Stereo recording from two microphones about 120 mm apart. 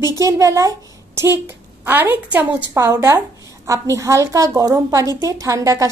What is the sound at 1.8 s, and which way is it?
A woman's voice, 15° right (ahead or behind).